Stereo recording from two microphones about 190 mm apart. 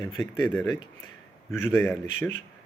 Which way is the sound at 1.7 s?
10° left (ahead or behind).